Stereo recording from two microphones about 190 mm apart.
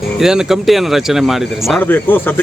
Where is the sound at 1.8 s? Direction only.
10° left (ahead or behind).